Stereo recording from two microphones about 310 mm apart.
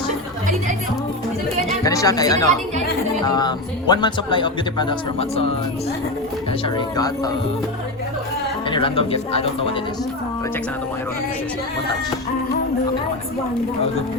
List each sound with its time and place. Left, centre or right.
1.8 s speech: centre
6.7 s speech: centre
8.7 s speech: centre